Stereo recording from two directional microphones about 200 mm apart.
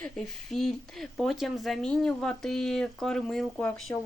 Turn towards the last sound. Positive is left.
turn(degrees=5)  # may be behind; listen again after turning